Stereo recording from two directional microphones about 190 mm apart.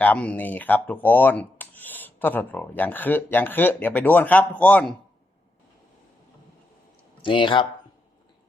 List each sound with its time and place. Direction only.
0.0 s speech: 10° left (ahead or behind)
7.2 s speech: 25° left (ahead or behind)